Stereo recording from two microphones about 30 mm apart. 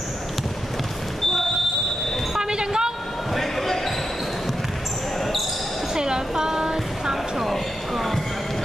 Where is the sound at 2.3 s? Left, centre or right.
Right.